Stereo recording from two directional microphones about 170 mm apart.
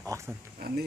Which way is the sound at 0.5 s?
65° right (ahead or behind).